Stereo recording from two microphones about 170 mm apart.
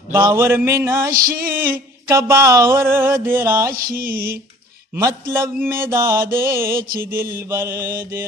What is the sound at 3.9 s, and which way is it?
Music, 60° right (ahead or behind).